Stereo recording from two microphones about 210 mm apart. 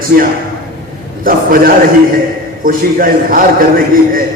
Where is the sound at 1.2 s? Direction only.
40° right (ahead or behind).